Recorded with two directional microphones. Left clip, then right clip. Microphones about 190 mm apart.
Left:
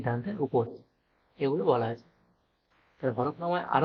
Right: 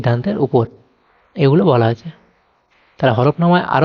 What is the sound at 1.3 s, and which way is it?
Speech, 50° right (ahead or behind).